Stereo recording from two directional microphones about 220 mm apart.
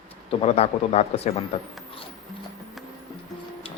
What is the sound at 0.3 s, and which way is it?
Speech, 30° left (ahead or behind).